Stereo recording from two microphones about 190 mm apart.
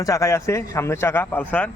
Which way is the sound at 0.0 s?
15° left (ahead or behind).